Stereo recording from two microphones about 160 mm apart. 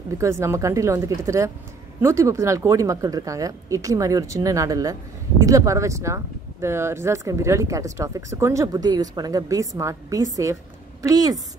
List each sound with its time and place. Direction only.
0.2 s speech: 15° right (ahead or behind)